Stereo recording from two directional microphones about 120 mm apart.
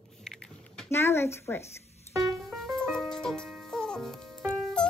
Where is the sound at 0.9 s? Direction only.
20° left (ahead or behind).